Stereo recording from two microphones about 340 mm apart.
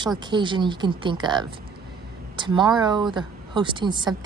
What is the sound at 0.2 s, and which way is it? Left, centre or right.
A woman's voice, centre.